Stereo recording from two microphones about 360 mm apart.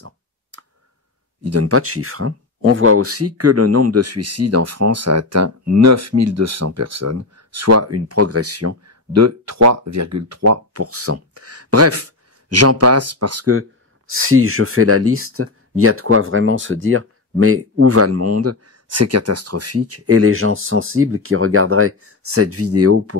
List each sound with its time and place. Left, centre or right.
0.0 s clicking: right
1.4 s speech: right